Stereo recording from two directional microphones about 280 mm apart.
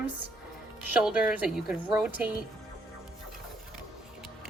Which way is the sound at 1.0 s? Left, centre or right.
Centre.